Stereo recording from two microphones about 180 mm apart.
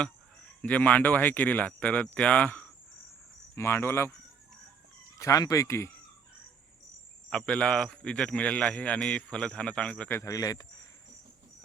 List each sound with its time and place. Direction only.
0.6 s speech: 10° left (ahead or behind)
5.2 s speech: 20° left (ahead or behind)
7.3 s speech: 5° left (ahead or behind)